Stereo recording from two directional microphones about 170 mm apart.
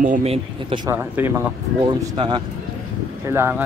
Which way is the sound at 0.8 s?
15° right (ahead or behind).